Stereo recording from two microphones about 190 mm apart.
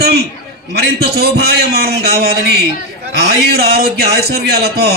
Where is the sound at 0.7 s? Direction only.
55° right (ahead or behind).